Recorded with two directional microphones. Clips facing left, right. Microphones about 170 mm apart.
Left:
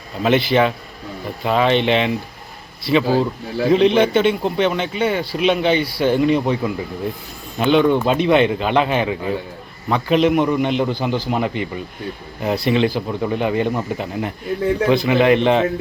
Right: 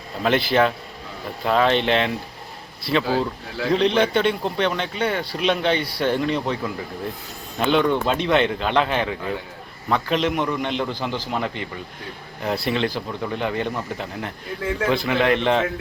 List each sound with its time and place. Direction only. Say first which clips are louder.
0.2 s speech: left 3 dB; centre (ahead or behind)
7.6 s speech: left 4 dB; centre (ahead or behind)
7.9 s a man's voice: left 5 dB; 10° left (ahead or behind)
12.5 s speech: left 7 dB; centre (ahead or behind)
13.1 s a man's voice: left 6 dB; 15° left (ahead or behind)